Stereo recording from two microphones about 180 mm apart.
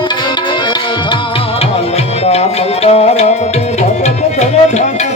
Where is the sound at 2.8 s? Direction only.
35° left (ahead or behind).